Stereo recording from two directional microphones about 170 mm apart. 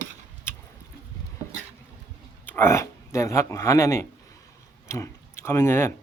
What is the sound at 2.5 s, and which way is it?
Speech, 15° left (ahead or behind).